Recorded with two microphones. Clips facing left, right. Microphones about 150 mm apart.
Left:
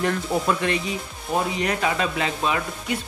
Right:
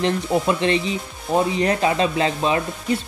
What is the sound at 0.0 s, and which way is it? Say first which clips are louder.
Speech: right 3 dB; 20° right (ahead or behind).